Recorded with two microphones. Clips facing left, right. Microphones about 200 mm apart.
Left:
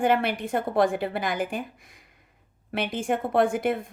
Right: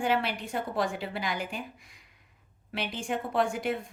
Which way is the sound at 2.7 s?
55° left (ahead or behind).